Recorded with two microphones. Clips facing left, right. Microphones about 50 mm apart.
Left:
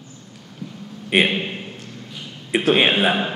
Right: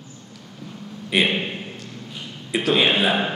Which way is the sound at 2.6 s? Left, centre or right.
Left.